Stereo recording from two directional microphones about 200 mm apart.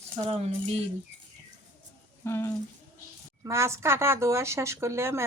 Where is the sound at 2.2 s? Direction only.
15° left (ahead or behind).